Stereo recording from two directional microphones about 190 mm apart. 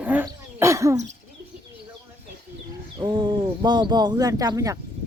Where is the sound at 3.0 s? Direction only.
25° right (ahead or behind).